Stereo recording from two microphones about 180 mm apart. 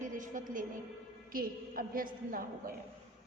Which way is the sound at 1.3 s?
50° right (ahead or behind).